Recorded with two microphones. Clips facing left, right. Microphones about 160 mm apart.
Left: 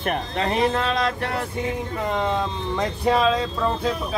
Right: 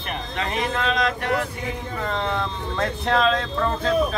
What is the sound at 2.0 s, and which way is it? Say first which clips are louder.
Speech: left 2 dB; 20° left (ahead or behind).